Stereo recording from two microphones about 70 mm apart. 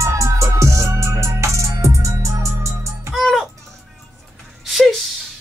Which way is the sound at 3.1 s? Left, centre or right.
Centre.